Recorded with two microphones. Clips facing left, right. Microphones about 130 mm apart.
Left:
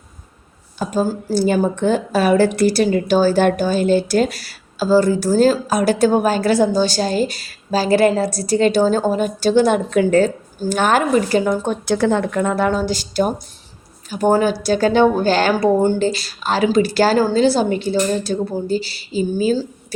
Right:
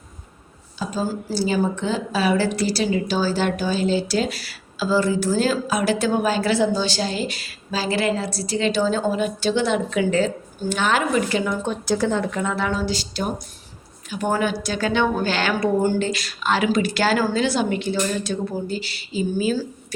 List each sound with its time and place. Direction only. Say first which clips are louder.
0.8 s speech: left 6 dB; 55° left (ahead or behind); by 19.6 s 35° left (ahead or behind)